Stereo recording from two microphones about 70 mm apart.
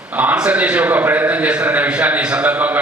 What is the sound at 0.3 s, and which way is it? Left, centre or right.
A man's voice, centre.